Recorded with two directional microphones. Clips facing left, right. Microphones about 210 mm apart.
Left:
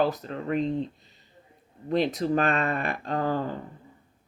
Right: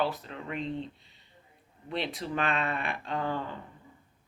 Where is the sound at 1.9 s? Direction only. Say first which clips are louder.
Left 9 dB; 40° left (ahead or behind).